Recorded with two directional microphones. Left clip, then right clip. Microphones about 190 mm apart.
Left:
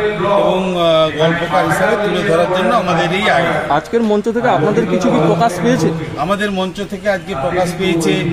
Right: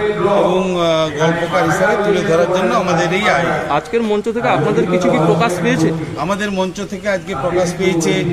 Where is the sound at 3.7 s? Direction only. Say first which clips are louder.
Left 2 dB; 55° left (ahead or behind).